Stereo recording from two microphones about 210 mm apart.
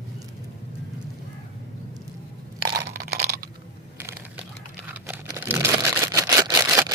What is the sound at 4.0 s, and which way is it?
Crushing, 10° right (ahead or behind).